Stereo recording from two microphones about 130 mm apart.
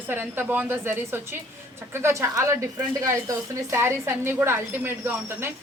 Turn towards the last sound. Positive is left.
turn(degrees=-15)  # may be behind; listen again after turning